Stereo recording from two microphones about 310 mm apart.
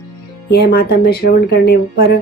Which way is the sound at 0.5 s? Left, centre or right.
Left.